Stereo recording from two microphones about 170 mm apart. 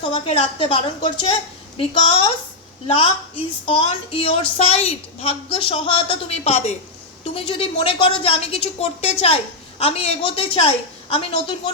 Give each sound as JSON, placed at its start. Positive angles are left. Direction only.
{"t": 0.0, "sound": "a woman's voice", "side_deg": 35}